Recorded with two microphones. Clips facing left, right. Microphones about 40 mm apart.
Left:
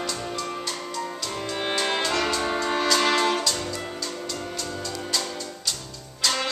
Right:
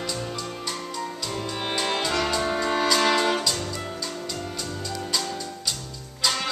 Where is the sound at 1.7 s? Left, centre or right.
Centre.